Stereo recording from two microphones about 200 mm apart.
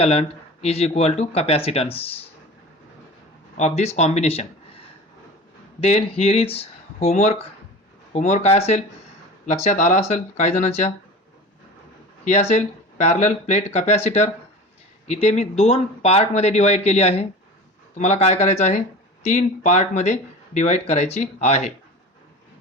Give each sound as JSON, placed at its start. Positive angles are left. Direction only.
{"t": 0.0, "sound": "speech", "side_deg": 30}
{"t": 3.6, "sound": "speech", "side_deg": 35}
{"t": 5.8, "sound": "speech", "side_deg": 30}
{"t": 12.2, "sound": "speech", "side_deg": 35}